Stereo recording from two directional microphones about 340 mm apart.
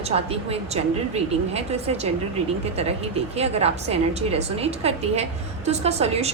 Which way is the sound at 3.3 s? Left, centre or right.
Centre.